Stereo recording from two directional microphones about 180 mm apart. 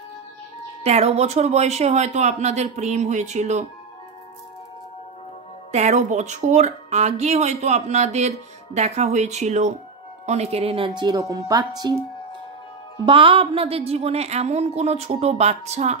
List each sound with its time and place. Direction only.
0.8 s speech: 35° right (ahead or behind)
5.7 s speech: 40° right (ahead or behind); by 11.9 s 20° right (ahead or behind)
13.0 s speech: 30° right (ahead or behind)